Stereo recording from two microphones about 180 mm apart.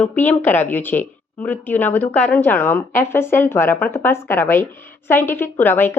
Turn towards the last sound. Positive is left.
turn(degrees=10)  # may be behind; listen again after turning